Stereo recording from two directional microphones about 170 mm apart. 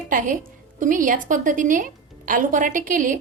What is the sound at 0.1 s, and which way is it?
A woman's voice, 50° right (ahead or behind).